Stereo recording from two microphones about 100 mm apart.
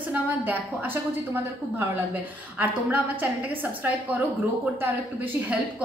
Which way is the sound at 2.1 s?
15° right (ahead or behind).